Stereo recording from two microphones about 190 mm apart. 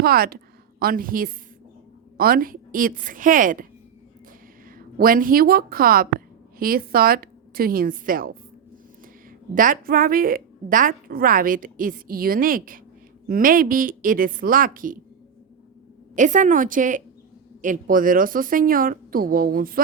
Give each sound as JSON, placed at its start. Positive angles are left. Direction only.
{"t": 0.0, "sound": "a woman's voice", "side_deg": -50}
{"t": 4.9, "sound": "a woman's voice", "side_deg": -50}
{"t": 9.6, "sound": "a woman's voice", "side_deg": -45}
{"t": 16.1, "sound": "a woman's voice", "side_deg": -40}